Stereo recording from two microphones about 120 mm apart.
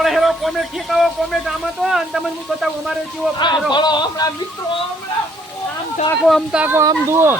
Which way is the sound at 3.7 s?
40° left (ahead or behind).